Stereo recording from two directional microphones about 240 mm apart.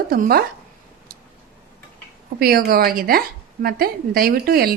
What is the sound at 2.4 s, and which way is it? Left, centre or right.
Speech, right.